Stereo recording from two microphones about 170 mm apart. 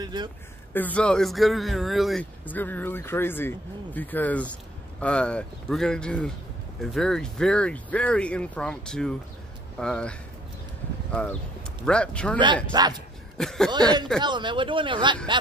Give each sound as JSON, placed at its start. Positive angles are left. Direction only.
{"t": 0.0, "sound": "speech", "side_deg": -25}
{"t": 0.7, "sound": "speech", "side_deg": 10}
{"t": 2.4, "sound": "speech", "side_deg": 10}
{"t": 12.7, "sound": "speech", "side_deg": -25}
{"t": 13.4, "sound": "speech", "side_deg": 0}
{"t": 14.2, "sound": "speech", "side_deg": -25}